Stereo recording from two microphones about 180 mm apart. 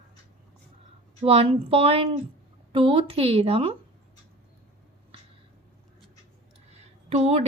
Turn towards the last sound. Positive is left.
turn(degrees=-35)  # may be behind; listen again after turning